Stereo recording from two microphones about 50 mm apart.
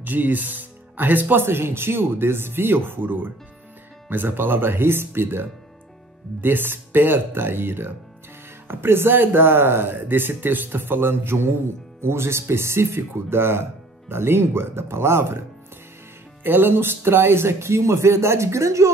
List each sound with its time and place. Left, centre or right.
0.0 s speech: right
16.4 s speech: right